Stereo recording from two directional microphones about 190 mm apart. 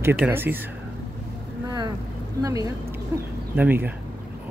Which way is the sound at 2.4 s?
20° right (ahead or behind).